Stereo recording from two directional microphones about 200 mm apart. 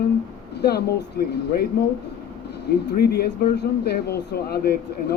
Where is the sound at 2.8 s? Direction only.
50° left (ahead or behind).